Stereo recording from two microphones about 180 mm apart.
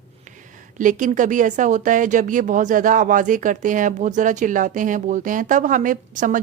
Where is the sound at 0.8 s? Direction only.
45° right (ahead or behind).